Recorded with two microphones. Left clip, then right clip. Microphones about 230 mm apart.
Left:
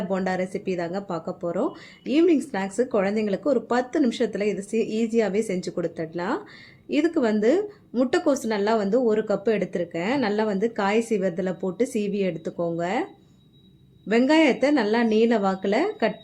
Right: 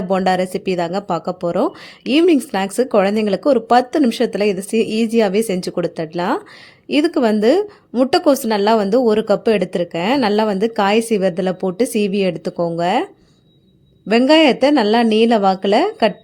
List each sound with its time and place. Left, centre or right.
0.1 s speech: right
14.1 s speech: right